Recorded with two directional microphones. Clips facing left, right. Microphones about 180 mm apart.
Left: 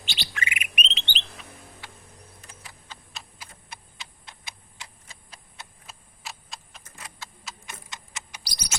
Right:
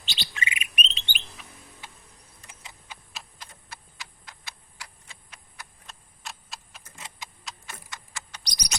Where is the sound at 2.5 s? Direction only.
20° right (ahead or behind).